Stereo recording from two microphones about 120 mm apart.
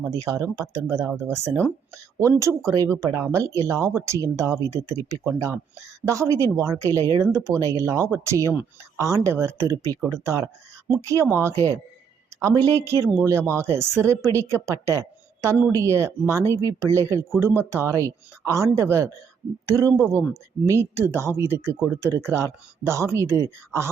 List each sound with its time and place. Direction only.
0.0 s speech: 25° right (ahead or behind)